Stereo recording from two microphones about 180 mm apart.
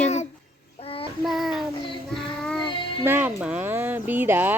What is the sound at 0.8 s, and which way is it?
Child singing, 35° left (ahead or behind).